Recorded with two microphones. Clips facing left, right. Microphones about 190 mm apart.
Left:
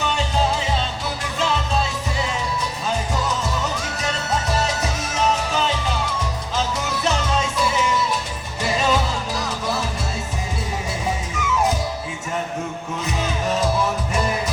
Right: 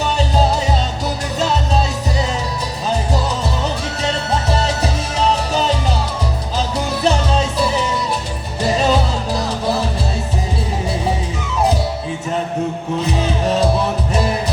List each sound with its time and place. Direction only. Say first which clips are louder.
0.0 s music: right 5 dB; 35° right (ahead or behind)
13.1 s music: right 4 dB; 35° right (ahead or behind)